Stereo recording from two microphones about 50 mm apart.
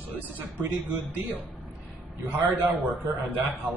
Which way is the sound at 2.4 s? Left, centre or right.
Right.